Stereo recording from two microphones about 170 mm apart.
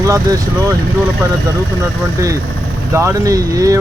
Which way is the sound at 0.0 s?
20° right (ahead or behind).